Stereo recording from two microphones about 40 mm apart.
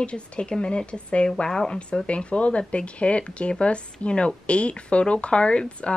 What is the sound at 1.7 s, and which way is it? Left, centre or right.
Speech, left.